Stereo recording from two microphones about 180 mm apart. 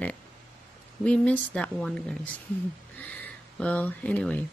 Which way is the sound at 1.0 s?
5° left (ahead or behind).